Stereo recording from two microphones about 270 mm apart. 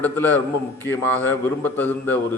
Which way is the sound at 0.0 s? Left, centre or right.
Centre.